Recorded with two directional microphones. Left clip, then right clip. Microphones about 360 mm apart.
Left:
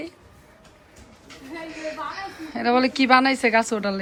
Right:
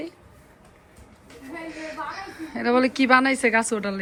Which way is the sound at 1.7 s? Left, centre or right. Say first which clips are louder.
Left 2 dB; centre.